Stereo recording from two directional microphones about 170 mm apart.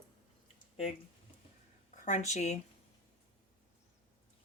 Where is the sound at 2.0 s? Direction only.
45° left (ahead or behind).